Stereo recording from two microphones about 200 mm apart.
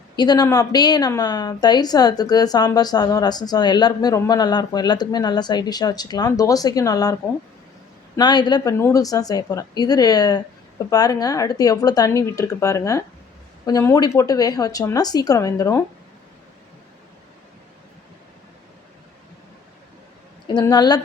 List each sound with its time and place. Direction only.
0.2 s a woman's voice: 20° left (ahead or behind)
20.5 s a woman's voice: 20° left (ahead or behind)